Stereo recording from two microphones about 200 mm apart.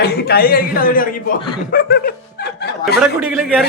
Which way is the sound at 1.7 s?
50° left (ahead or behind).